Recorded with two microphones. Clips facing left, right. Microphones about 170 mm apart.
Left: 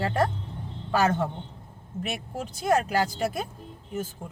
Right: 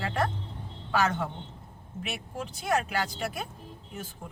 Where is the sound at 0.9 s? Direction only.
40° left (ahead or behind).